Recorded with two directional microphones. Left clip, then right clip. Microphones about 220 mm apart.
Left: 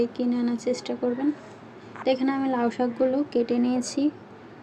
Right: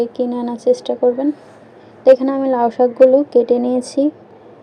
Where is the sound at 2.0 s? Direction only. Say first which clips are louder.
Right 13 dB; 15° right (ahead or behind).